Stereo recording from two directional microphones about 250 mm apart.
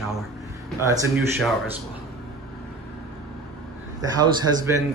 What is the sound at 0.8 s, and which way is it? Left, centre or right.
Speech, centre.